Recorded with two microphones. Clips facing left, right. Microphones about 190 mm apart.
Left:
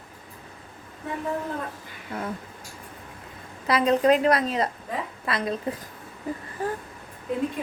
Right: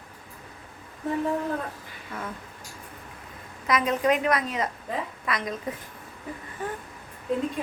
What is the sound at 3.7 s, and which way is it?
A woman's voice, 30° left (ahead or behind).